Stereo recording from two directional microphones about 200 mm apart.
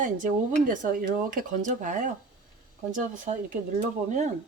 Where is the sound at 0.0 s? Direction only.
40° right (ahead or behind).